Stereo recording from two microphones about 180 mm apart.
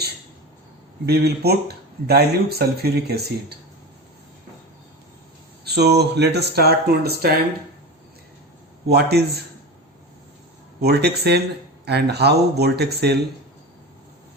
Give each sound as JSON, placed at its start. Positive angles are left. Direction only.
{"t": 1.0, "sound": "speech", "side_deg": -60}
{"t": 5.6, "sound": "speech", "side_deg": -65}
{"t": 8.9, "sound": "speech", "side_deg": -65}
{"t": 10.8, "sound": "speech", "side_deg": -65}